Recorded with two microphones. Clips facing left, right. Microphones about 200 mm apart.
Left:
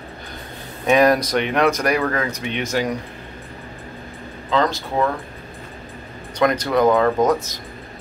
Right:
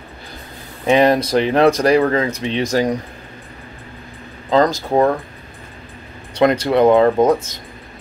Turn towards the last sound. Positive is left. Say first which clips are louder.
# right 4 dB
turn(degrees=-30)  # may be behind; listen again after turning